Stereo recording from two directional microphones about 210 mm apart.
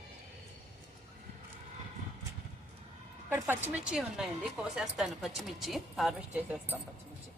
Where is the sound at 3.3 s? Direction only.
10° right (ahead or behind).